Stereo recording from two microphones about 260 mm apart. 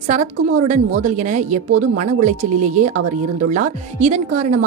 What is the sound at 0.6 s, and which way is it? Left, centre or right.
A woman's voice, right.